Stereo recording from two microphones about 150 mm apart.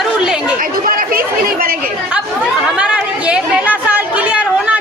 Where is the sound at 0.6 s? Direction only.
65° right (ahead or behind).